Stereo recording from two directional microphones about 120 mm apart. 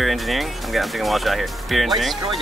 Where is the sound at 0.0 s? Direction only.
Centre (ahead or behind).